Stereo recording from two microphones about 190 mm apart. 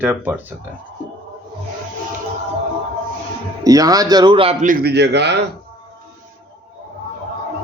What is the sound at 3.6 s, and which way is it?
A man's voice, 20° right (ahead or behind).